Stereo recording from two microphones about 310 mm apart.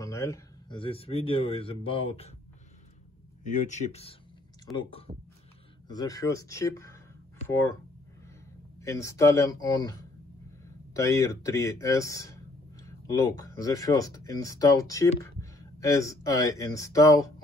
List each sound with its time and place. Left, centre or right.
0.0 s speech: centre
3.4 s speech: left
8.7 s speech: centre